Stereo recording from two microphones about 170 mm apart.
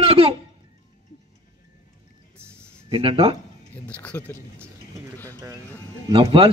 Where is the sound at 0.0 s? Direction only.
35° right (ahead or behind).